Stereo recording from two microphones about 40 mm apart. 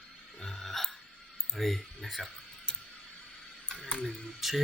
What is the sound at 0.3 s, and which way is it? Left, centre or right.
Hiccup, centre.